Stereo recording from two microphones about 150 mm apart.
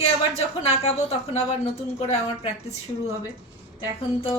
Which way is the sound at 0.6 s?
45° left (ahead or behind).